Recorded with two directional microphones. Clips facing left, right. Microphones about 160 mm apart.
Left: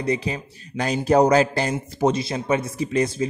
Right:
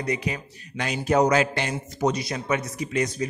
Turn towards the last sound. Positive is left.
turn(degrees=30)  # may be behind; listen again after turning